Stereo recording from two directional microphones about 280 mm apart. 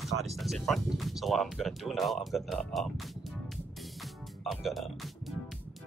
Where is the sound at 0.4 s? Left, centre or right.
Centre.